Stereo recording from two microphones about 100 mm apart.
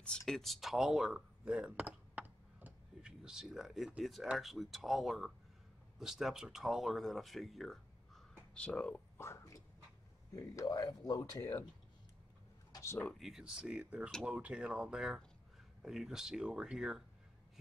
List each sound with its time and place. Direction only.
0.0 s speech: 5° left (ahead or behind)
9.2 s speech: 25° left (ahead or behind)
12.7 s a sound: 30° left (ahead or behind)
13.2 s speech: 5° right (ahead or behind)